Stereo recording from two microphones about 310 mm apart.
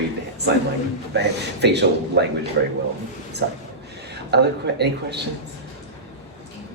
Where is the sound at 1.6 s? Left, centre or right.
Right.